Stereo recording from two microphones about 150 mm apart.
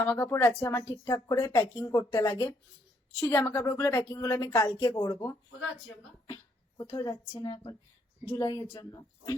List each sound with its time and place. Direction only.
0.0 s a woman's voice: 15° left (ahead or behind)
6.7 s a woman's voice: 25° left (ahead or behind)